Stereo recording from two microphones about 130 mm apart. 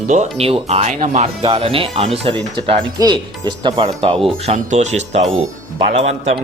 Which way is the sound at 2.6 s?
35° right (ahead or behind).